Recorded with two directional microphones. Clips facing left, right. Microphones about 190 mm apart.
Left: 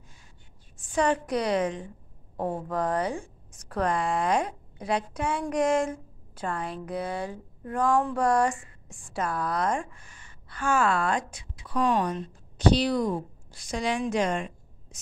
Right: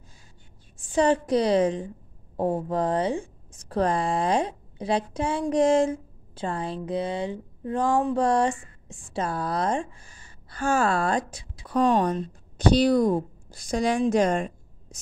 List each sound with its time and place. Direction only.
0.9 s a woman's voice: 30° right (ahead or behind)